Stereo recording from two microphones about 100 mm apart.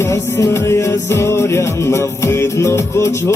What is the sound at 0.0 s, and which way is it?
Music, 30° left (ahead or behind).